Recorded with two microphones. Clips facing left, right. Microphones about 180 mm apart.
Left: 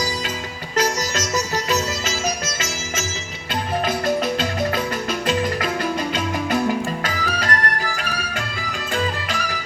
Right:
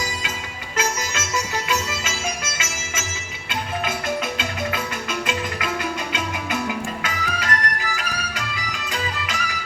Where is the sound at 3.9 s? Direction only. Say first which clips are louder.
Left 6 dB; 45° left (ahead or behind).